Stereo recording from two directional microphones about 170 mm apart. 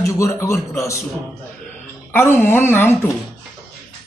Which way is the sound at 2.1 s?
15° left (ahead or behind).